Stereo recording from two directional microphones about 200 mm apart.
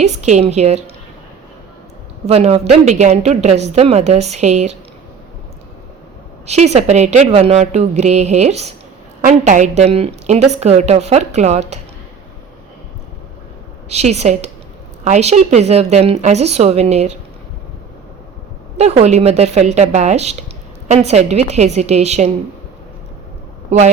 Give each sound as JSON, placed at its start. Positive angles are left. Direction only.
{"t": 0.0, "sound": "a woman's voice", "side_deg": -35}
{"t": 2.2, "sound": "a woman's voice", "side_deg": -30}
{"t": 6.4, "sound": "a woman's voice", "side_deg": -35}
{"t": 13.9, "sound": "a woman's voice", "side_deg": -35}
{"t": 19.0, "sound": "a woman's voice", "side_deg": -35}